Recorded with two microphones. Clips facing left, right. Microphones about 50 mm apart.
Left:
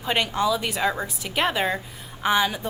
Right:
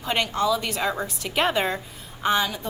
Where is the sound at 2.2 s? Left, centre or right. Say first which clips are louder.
Left 1 dB; centre.